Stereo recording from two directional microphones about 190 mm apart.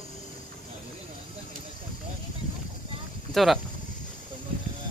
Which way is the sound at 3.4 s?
Centre (ahead or behind).